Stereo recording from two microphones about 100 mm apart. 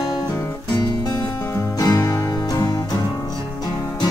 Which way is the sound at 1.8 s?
35° left (ahead or behind).